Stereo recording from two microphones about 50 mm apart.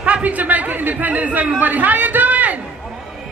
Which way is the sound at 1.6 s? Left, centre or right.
Right.